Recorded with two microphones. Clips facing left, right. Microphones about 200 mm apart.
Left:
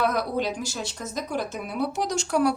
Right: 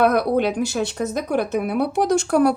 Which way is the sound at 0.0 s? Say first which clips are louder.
Right 7 dB; 60° right (ahead or behind).